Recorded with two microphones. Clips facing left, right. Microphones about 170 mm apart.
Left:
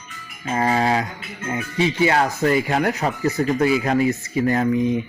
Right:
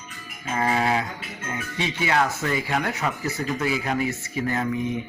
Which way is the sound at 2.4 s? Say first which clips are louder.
Left 7 dB; 35° left (ahead or behind).